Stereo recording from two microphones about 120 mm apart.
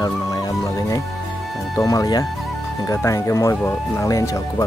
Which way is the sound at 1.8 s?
30° left (ahead or behind).